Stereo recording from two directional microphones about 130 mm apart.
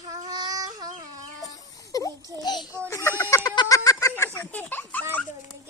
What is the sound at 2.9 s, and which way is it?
Speech, 20° left (ahead or behind).